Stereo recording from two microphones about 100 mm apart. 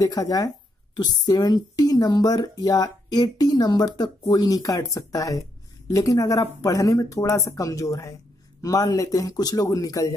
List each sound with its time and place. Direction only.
0.0 s speech: 40° left (ahead or behind)